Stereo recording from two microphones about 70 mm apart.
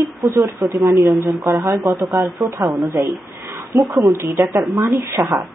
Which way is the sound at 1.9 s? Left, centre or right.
Right.